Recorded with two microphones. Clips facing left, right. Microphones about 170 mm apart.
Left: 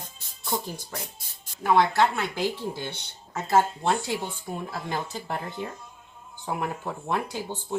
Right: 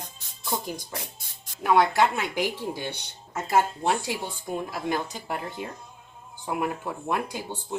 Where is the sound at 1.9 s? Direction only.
15° right (ahead or behind).